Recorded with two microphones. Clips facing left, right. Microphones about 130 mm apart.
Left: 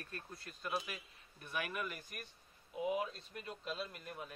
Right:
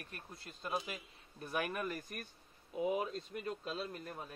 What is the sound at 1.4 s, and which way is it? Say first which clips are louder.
A man's voice: right 4 dB; 40° right (ahead or behind).